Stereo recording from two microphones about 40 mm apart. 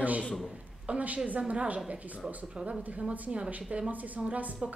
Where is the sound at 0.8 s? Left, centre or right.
Right.